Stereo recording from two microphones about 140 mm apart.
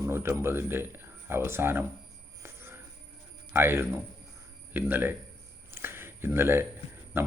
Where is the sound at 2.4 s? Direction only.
20° right (ahead or behind).